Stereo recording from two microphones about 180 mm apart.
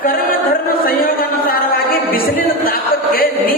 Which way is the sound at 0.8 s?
55° left (ahead or behind).